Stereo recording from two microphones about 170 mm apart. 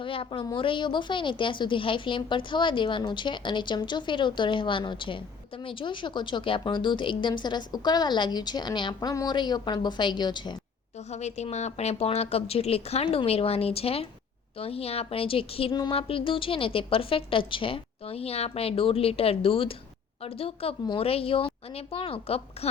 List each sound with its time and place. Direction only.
0.0 s a woman's voice: 30° left (ahead or behind)
11.1 s speech: 40° left (ahead or behind)